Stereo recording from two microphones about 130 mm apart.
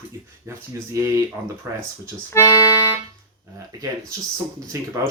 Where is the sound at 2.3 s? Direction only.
25° left (ahead or behind).